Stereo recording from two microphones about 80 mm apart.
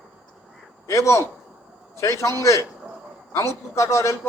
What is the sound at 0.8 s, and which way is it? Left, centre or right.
A man's voice, left.